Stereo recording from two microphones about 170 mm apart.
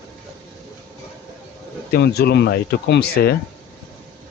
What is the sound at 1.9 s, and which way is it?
Speech, 70° left (ahead or behind).